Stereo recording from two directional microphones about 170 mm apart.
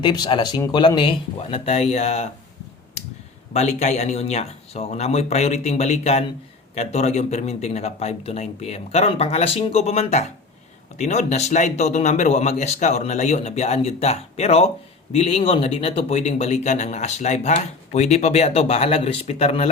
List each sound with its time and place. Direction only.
0.0 s speech: 25° left (ahead or behind)
3.5 s speech: 40° left (ahead or behind)